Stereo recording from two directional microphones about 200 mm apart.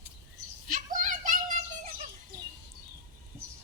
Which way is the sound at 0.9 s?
40° right (ahead or behind).